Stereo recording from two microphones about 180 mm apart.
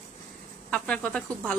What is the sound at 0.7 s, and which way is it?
Speech, 5° left (ahead or behind).